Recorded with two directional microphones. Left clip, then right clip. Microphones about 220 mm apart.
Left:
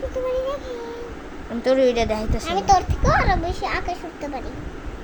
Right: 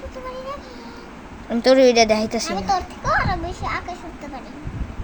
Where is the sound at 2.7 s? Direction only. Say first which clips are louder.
Left 4 dB; 25° left (ahead or behind).